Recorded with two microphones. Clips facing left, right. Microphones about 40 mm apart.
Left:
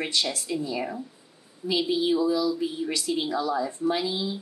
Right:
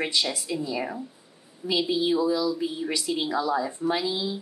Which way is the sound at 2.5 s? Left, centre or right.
Centre.